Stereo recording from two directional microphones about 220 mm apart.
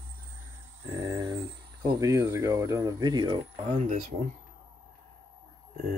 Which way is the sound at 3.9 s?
35° right (ahead or behind).